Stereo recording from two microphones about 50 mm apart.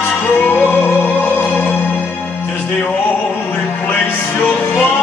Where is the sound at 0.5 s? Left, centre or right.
Left.